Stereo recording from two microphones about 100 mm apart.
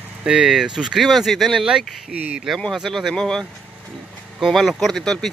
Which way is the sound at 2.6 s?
Centre (ahead or behind).